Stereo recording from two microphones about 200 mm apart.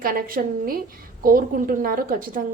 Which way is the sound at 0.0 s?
45° right (ahead or behind).